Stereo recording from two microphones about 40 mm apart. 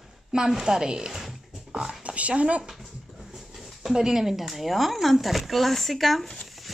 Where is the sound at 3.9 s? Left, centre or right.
Centre.